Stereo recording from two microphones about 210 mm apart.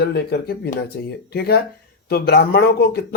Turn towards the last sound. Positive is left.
turn(degrees=50)  # may be behind; listen again after turning